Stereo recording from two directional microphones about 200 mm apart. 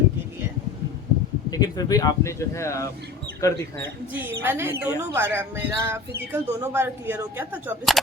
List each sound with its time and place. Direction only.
1.5 s speech: 20° left (ahead or behind)
4.1 s speech: 10° right (ahead or behind)